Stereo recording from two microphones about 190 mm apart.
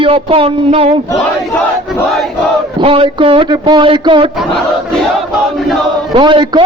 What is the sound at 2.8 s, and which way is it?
A man's voice, 30° right (ahead or behind).